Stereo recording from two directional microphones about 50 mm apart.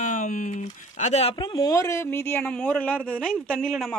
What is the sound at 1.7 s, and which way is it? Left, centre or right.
Speech, left.